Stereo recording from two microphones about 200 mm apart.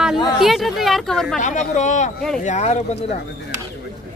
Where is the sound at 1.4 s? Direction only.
35° left (ahead or behind).